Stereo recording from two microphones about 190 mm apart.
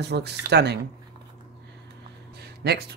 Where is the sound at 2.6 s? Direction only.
60° right (ahead or behind).